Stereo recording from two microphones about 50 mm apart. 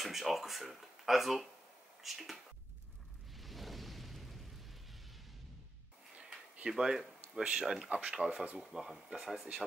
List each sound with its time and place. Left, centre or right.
0.0 s speech: centre
3.3 s eruption: centre
6.8 s speech: centre
8.5 s speech: centre